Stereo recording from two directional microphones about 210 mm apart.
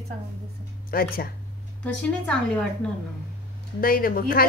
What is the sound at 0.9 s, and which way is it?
Speech, 45° left (ahead or behind).